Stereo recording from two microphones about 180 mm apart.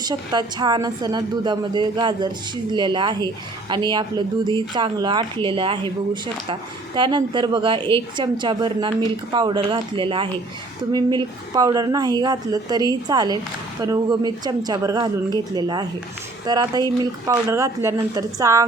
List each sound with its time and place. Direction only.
0.1 s a woman's voice: 25° right (ahead or behind)